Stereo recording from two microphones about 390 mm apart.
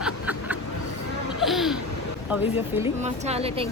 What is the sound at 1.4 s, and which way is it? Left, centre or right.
Speech, centre.